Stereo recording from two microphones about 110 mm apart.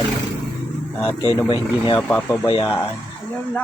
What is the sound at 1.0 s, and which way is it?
Speech, 65° left (ahead or behind).